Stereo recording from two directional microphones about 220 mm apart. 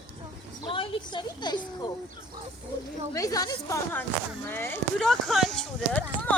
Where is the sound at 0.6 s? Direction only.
25° left (ahead or behind).